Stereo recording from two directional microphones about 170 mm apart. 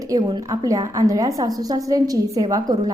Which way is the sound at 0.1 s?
25° right (ahead or behind).